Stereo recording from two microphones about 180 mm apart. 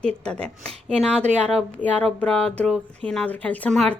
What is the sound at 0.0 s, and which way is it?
Music, 5° left (ahead or behind).